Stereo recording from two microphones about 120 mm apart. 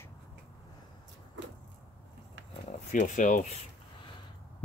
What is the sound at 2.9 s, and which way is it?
Speech, 90° left.